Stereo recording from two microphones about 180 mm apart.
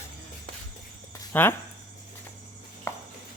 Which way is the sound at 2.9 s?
15° left (ahead or behind).